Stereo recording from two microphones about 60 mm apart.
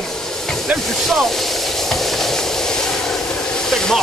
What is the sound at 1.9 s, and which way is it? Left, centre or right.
Train, centre.